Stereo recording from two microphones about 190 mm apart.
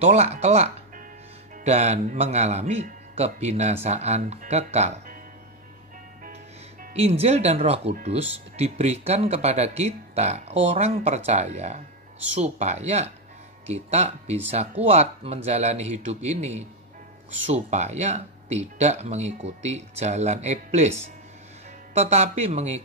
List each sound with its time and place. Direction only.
0.0 s speech: 35° right (ahead or behind)
6.8 s speech: 35° right (ahead or behind)
21.9 s speech: 35° right (ahead or behind)